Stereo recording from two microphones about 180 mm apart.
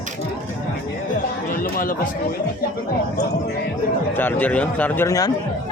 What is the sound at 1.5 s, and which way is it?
Music, 50° left (ahead or behind).